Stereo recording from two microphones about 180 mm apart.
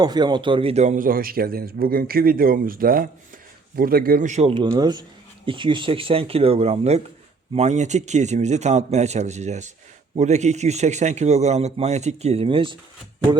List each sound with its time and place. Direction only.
0.0 s a man's voice: 25° right (ahead or behind)